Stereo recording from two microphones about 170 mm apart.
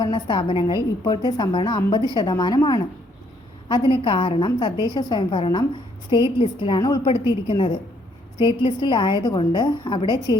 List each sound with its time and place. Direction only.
0.0 s a woman's voice: 25° left (ahead or behind)